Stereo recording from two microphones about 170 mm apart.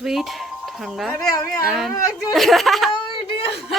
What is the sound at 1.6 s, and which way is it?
Speech, centre (ahead or behind).